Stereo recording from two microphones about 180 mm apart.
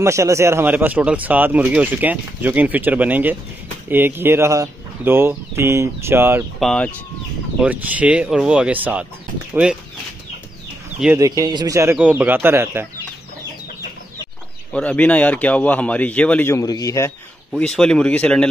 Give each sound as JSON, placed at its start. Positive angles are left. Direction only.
{"t": 0.0, "sound": "speech", "side_deg": -15}
{"t": 6.6, "sound": "speech", "side_deg": 5}
{"t": 7.6, "sound": "speech", "side_deg": -10}
{"t": 11.1, "sound": "speech", "side_deg": -20}
{"t": 14.7, "sound": "a man's voice", "side_deg": 5}
{"t": 17.5, "sound": "speech", "side_deg": 5}